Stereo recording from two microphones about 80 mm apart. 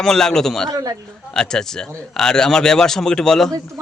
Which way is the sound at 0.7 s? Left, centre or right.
Right.